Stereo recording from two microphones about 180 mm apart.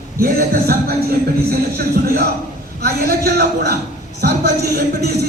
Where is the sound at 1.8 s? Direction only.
55° right (ahead or behind).